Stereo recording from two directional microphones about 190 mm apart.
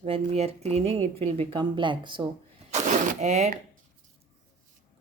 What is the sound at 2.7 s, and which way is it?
Speech, 40° right (ahead or behind).